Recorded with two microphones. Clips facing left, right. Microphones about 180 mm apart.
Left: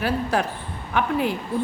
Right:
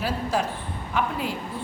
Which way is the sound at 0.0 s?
60° left (ahead or behind).